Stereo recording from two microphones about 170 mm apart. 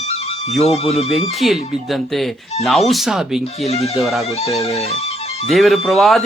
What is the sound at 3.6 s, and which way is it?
Speech, 40° left (ahead or behind).